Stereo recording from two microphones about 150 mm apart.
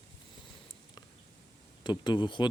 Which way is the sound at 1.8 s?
30° left (ahead or behind).